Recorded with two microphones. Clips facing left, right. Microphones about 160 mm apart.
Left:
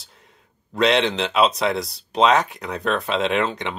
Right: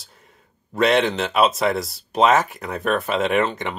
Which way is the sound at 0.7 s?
Centre (ahead or behind).